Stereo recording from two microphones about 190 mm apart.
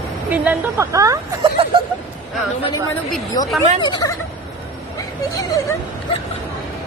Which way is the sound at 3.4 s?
20° left (ahead or behind).